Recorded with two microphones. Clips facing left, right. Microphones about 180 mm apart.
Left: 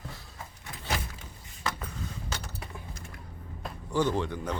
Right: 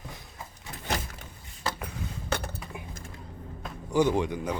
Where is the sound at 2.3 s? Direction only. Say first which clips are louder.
Right 7 dB; 55° right (ahead or behind).